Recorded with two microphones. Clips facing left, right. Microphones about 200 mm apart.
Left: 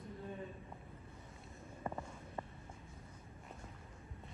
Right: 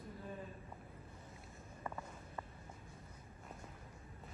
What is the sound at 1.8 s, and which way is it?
Walk, 25° left (ahead or behind).